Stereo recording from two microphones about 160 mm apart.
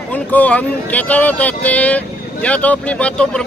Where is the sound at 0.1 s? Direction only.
10° left (ahead or behind).